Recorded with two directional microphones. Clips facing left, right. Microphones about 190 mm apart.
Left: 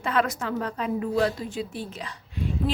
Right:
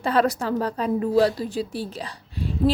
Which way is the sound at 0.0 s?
35° right (ahead or behind).